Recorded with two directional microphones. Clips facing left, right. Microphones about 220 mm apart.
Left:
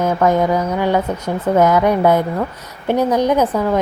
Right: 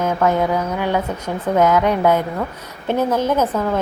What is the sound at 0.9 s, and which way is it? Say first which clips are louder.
A woman's voice: left 3 dB; 10° left (ahead or behind).